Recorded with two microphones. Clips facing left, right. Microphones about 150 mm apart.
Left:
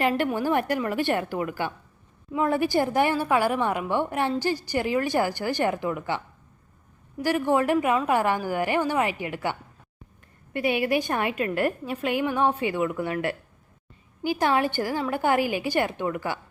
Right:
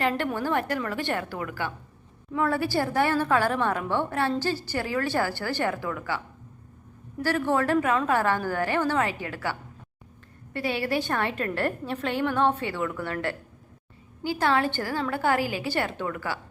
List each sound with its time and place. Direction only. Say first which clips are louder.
0.0 s a woman's voice: left 3 dB; 15° left (ahead or behind)